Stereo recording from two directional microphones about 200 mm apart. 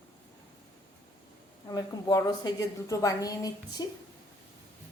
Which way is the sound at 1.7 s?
20° left (ahead or behind).